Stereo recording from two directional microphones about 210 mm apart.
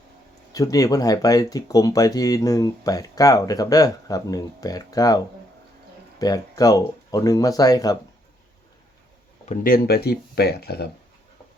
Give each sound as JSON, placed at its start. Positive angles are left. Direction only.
{"t": 0.5, "sound": "speech", "side_deg": 15}
{"t": 9.5, "sound": "speech", "side_deg": 45}